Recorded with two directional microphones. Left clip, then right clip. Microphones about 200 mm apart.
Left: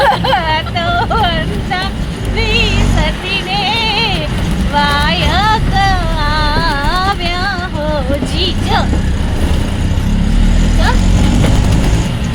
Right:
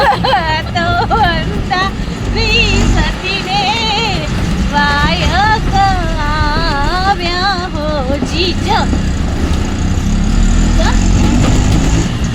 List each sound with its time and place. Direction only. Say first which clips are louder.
0.0 s vehicle: even; 15° right (ahead or behind)
2.4 s music: right 2 dB; 10° right (ahead or behind)
3.5 s vehicle: right 1 dB; 5° right (ahead or behind)
4.7 s a sound: even; centre (ahead or behind)
8.4 s vehicle: right 2 dB; 15° right (ahead or behind)